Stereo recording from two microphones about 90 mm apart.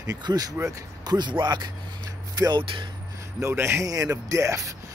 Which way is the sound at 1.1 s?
55° right (ahead or behind).